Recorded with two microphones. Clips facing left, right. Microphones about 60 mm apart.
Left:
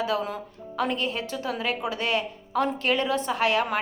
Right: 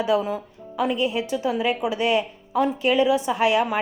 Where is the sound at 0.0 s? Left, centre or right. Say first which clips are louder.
Right 5 dB; centre.